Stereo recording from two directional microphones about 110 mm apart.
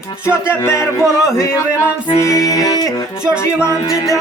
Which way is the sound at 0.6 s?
25° left (ahead or behind).